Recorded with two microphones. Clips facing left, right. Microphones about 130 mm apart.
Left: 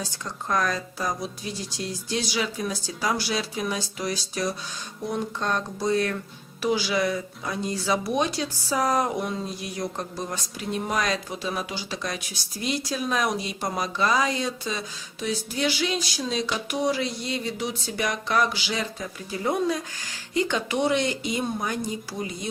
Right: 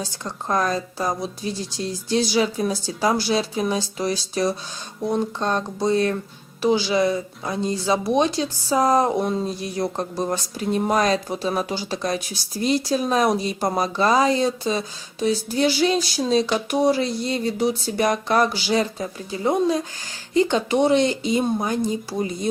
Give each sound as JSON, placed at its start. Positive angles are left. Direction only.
{"t": 0.0, "sound": "a woman's voice", "side_deg": -30}
{"t": 19.3, "sound": "a woman's voice", "side_deg": -25}